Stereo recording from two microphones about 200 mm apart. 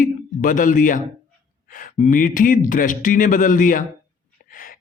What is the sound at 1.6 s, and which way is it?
Speech, 45° left (ahead or behind).